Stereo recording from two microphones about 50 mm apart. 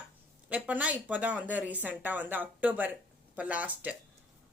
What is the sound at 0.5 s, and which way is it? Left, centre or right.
A woman's voice, right.